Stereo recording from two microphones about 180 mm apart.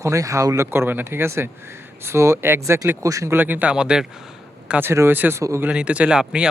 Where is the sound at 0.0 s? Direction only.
15° right (ahead or behind).